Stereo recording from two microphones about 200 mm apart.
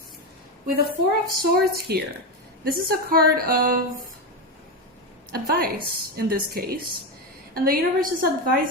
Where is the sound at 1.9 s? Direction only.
55° right (ahead or behind).